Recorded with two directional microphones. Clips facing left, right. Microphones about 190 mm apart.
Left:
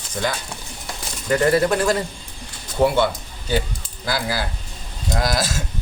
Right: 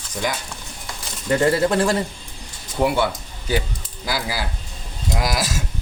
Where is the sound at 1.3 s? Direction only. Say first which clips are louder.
Even; 25° right (ahead or behind).